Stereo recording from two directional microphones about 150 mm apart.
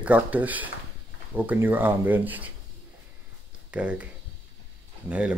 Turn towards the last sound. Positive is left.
turn(degrees=-10)  # may be behind; listen again after turning